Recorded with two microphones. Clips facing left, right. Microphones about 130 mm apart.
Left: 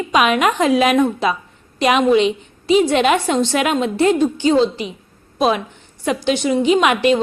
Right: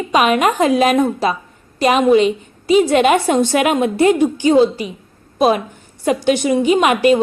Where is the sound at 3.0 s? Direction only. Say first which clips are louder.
Right 3 dB; 50° right (ahead or behind).